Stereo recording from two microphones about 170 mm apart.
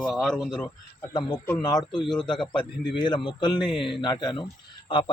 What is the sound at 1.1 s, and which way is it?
Speech, 25° left (ahead or behind).